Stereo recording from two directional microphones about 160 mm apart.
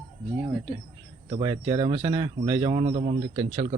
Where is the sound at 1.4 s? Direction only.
25° right (ahead or behind); by 3.4 s 40° right (ahead or behind).